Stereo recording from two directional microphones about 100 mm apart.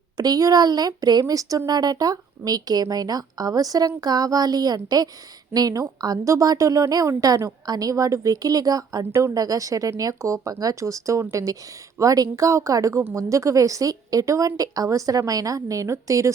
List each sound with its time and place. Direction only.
0.2 s speech: 40° right (ahead or behind)